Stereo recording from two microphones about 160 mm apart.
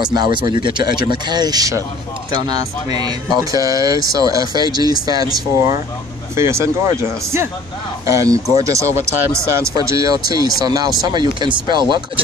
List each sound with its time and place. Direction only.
0.0 s speech: 25° right (ahead or behind)